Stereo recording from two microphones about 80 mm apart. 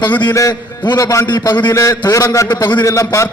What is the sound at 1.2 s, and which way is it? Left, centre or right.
Speech, left.